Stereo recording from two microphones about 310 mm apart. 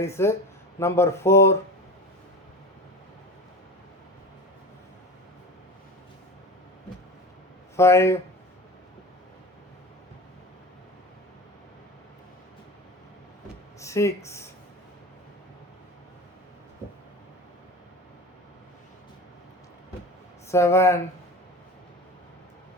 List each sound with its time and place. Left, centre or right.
0.0 s speech: centre
7.8 s speech: centre
13.7 s a sound: centre
20.5 s speech: centre